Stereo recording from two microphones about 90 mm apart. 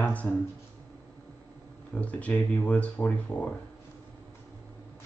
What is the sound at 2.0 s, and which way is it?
Speech, 15° left (ahead or behind).